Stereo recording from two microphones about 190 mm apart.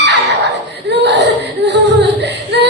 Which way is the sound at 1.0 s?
65° right (ahead or behind).